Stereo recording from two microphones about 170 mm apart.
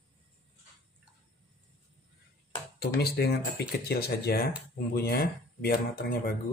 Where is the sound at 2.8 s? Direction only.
70° left (ahead or behind).